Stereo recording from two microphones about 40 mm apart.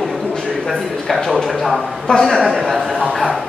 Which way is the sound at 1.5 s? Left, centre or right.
Centre.